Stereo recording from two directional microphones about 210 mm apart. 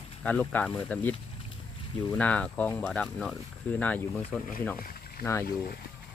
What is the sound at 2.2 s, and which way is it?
Speech, 5° left (ahead or behind).